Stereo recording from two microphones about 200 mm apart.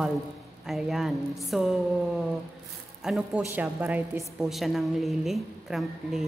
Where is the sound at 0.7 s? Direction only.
Centre (ahead or behind).